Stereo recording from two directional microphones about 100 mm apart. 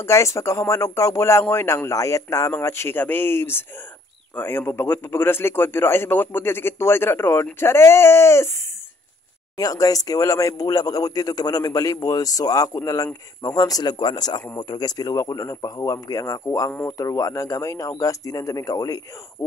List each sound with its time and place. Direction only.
0.0 s a man's voice: 30° left (ahead or behind)
9.6 s speech: 35° left (ahead or behind)